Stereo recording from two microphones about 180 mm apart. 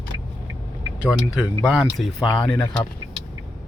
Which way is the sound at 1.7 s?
Centre (ahead or behind).